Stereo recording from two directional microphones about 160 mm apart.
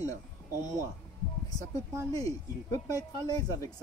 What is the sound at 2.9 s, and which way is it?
Speech, 25° left (ahead or behind).